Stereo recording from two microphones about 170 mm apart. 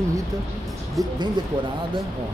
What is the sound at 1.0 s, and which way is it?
Speech, 20° right (ahead or behind).